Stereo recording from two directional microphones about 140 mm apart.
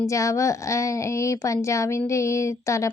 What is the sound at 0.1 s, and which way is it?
Speech, 20° left (ahead or behind).